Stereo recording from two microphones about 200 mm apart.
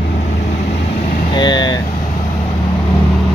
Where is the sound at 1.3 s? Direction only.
20° left (ahead or behind).